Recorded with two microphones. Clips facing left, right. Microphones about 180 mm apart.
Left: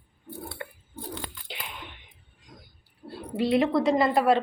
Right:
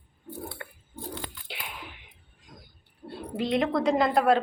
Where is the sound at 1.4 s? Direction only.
Centre (ahead or behind).